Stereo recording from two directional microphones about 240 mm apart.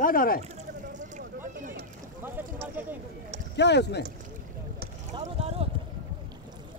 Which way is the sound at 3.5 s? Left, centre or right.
Left.